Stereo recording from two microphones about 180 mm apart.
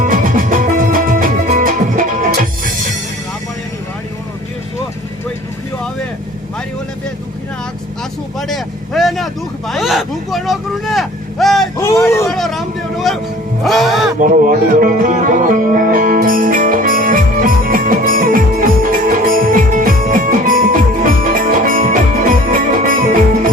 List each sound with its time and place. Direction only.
0.0 s music: 50° right (ahead or behind)
8.4 s vehicle: centre (ahead or behind)
11.8 s a sound: 15° left (ahead or behind)
12.2 s vehicle: centre (ahead or behind)
13.7 s music: centre (ahead or behind)
14.2 s music: 45° right (ahead or behind)